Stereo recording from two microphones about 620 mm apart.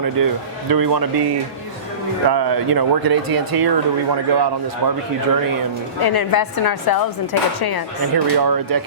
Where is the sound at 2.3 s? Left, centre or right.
Right.